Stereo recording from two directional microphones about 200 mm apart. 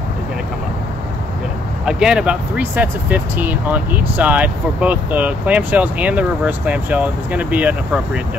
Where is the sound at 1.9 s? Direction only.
5° right (ahead or behind).